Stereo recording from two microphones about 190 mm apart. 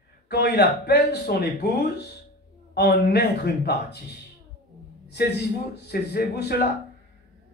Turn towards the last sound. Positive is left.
turn(degrees=60)  # may be behind; listen again after turning